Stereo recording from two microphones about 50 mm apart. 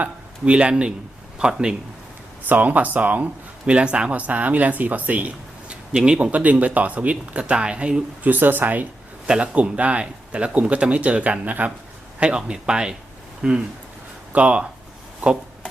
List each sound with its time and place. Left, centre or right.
0.0 s a man's voice: right
2.5 s speech: right
3.7 s speech: right
8.2 s speech: right
9.2 s speech: centre
12.2 s speech: centre
14.3 s speech: right